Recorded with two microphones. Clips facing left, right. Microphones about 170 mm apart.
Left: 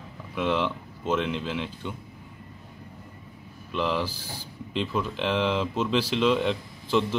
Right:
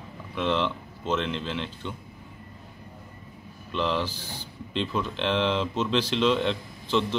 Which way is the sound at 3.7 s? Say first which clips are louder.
Even; 5° left (ahead or behind).